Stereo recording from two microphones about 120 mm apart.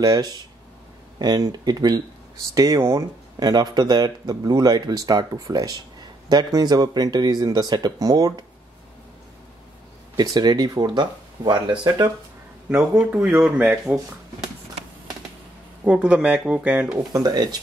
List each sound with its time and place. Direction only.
0.0 s speech: 30° right (ahead or behind)
10.1 s speech: 35° right (ahead or behind)
12.6 s speech: 15° right (ahead or behind)
15.8 s speech: 10° right (ahead or behind)
17.1 s speech: 30° right (ahead or behind)